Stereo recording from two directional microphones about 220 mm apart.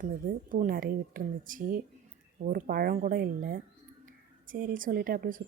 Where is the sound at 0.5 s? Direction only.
40° right (ahead or behind).